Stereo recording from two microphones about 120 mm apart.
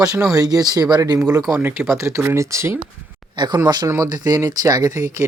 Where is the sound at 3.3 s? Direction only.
35° right (ahead or behind).